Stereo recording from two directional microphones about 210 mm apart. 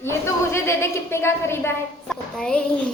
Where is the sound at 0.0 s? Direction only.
10° left (ahead or behind).